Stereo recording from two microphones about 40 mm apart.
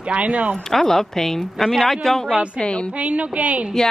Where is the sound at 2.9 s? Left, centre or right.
Right.